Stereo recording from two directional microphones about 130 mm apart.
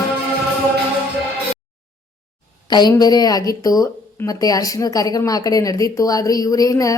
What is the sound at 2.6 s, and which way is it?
A woman's voice, 35° left (ahead or behind).